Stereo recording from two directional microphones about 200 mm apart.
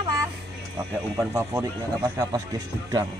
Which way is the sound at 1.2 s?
10° right (ahead or behind).